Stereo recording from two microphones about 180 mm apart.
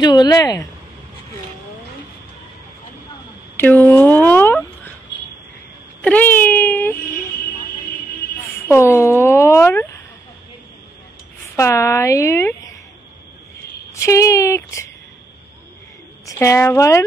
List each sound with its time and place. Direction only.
0.0 s speech: 25° left (ahead or behind)
3.5 s a sound: 10° left (ahead or behind)
6.0 s baby cry: 10° left (ahead or behind)
8.4 s a sound: 15° left (ahead or behind)
11.5 s speech: 15° left (ahead or behind)
13.9 s speech: 15° left (ahead or behind)
16.3 s speech: 15° left (ahead or behind)